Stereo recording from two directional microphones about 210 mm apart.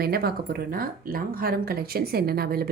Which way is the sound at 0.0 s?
45° right (ahead or behind).